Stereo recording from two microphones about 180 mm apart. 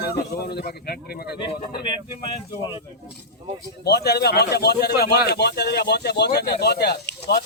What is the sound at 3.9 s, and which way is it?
Speech, 65° left (ahead or behind).